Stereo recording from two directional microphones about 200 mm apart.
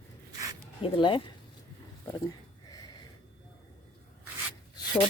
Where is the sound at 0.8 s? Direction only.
25° left (ahead or behind).